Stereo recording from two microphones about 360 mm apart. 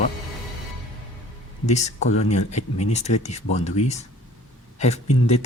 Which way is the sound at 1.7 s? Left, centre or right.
Centre.